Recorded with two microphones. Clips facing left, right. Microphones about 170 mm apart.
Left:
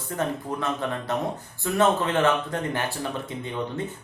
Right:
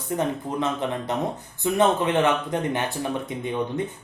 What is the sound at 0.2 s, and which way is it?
Speech, 20° right (ahead or behind).